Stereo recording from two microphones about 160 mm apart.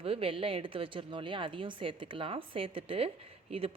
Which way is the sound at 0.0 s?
35° right (ahead or behind).